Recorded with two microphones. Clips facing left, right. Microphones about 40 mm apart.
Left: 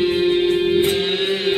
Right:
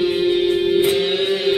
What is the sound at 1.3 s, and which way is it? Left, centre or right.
Music, left.